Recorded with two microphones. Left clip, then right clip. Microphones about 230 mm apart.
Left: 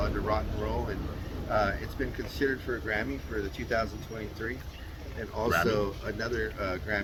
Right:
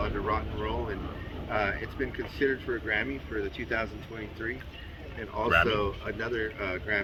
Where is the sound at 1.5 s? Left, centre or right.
Centre.